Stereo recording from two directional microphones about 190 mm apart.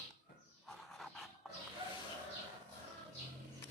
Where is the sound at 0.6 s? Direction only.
Centre (ahead or behind).